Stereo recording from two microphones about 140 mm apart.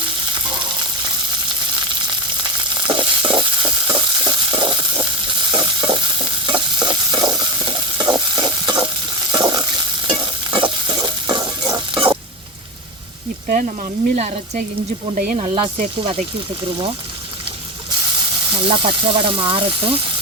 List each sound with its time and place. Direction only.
2.7 s stir: 35° right (ahead or behind)
9.3 s frying: 30° right (ahead or behind)
10.1 s stir: 35° right (ahead or behind)
13.5 s a sound: 70° right (ahead or behind)
14.2 s speech: 50° right (ahead or behind)
15.1 s speech: 85° right
15.4 s speech: 40° right (ahead or behind)
18.5 s speech: 40° right (ahead or behind)